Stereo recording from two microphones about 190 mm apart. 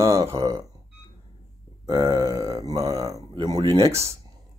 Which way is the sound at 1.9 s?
15° right (ahead or behind).